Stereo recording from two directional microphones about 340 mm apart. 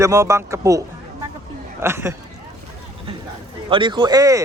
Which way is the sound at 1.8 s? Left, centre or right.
Centre.